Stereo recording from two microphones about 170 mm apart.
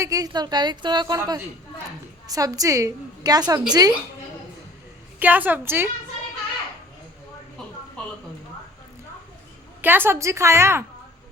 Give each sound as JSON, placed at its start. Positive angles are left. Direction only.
{"t": 0.0, "sound": "a woman's voice", "side_deg": -20}
{"t": 5.2, "sound": "a woman's voice", "side_deg": -10}
{"t": 9.8, "sound": "a woman's voice", "side_deg": -10}